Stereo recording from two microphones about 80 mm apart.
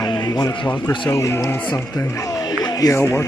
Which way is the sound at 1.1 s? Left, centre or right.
Left.